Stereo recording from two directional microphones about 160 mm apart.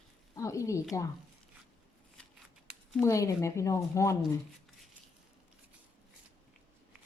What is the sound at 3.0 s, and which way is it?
Speech, 20° left (ahead or behind).